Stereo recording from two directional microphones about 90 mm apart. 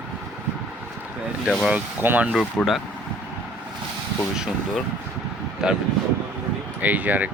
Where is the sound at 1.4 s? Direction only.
5° right (ahead or behind).